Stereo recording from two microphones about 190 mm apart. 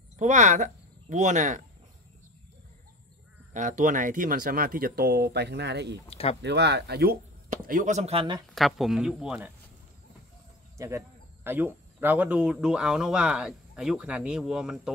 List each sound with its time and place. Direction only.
0.2 s a woman's voice: 40° right (ahead or behind)
3.5 s speech: 40° right (ahead or behind); by 5.9 s 60° right (ahead or behind)
6.0 s speech: 30° left (ahead or behind)
6.4 s speech: 60° right (ahead or behind)
7.4 s speech: 45° right (ahead or behind)
8.5 s speech: centre (ahead or behind)
10.8 s speech: 15° right (ahead or behind)